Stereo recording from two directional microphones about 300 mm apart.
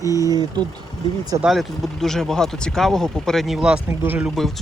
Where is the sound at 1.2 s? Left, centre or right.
Centre.